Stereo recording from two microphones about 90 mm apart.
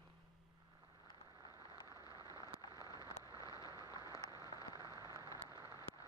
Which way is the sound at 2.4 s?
40° left (ahead or behind).